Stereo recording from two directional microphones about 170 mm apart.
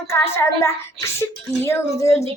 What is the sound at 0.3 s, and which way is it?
A child's voice, 15° left (ahead or behind).